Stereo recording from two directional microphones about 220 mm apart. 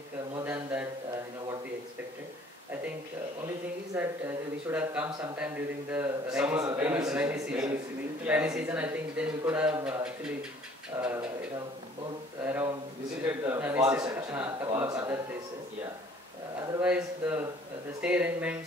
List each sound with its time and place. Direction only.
0.5 s a sound: 10° right (ahead or behind)
3.9 s a man's voice: 5° right (ahead or behind)
12.4 s a man's voice: 10° right (ahead or behind)
16.8 s a man's voice: 5° right (ahead or behind)